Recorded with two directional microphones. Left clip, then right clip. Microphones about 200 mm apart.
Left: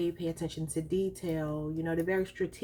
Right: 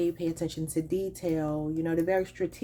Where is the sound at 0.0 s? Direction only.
35° right (ahead or behind).